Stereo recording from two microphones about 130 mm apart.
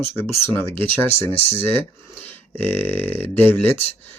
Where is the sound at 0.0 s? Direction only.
20° left (ahead or behind).